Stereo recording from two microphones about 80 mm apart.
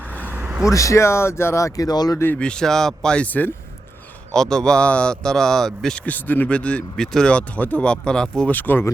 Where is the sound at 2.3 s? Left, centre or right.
Centre.